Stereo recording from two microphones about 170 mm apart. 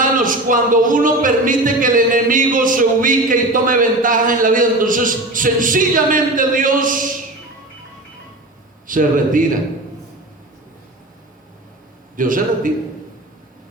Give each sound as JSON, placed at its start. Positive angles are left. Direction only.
{"t": 0.0, "sound": "speech", "side_deg": -50}
{"t": 8.9, "sound": "speech", "side_deg": -50}
{"t": 12.1, "sound": "speech", "side_deg": -50}